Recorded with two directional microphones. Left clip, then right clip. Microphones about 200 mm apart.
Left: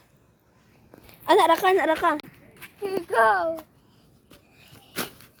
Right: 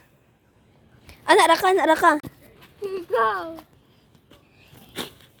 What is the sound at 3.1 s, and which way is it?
Speech, 50° left (ahead or behind).